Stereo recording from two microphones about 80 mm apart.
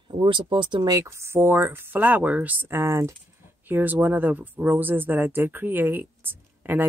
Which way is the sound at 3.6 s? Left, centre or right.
Right.